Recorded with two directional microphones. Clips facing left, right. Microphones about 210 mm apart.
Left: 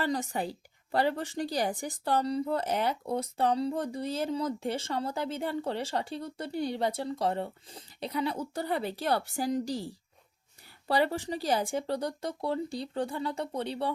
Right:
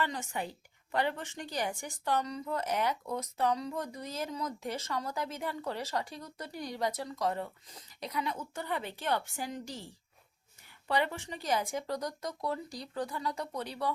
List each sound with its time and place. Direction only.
0.0 s a woman's voice: 35° left (ahead or behind)